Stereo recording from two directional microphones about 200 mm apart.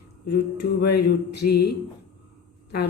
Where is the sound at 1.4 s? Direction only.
50° left (ahead or behind).